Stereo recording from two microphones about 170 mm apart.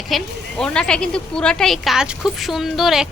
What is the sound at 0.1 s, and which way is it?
A woman's voice, 5° left (ahead or behind).